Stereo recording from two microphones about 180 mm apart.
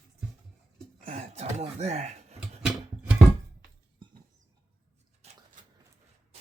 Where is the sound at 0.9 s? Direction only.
40° right (ahead or behind).